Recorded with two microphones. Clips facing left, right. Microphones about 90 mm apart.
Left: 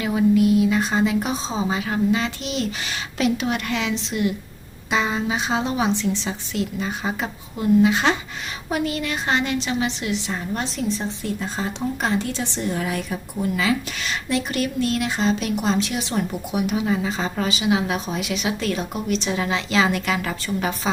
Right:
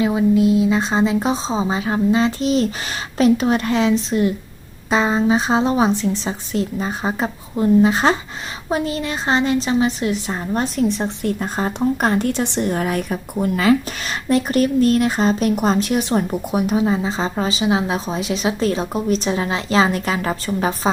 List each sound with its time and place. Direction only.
0.0 s a woman's voice: 25° right (ahead or behind); by 10.8 s 40° right (ahead or behind)
10.8 s speech: 60° right (ahead or behind); by 20.9 s 35° right (ahead or behind)